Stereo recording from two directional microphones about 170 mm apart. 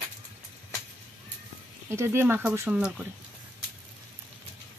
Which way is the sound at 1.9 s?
15° right (ahead or behind).